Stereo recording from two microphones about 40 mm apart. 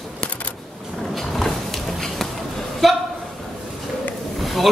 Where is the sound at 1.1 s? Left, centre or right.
Centre.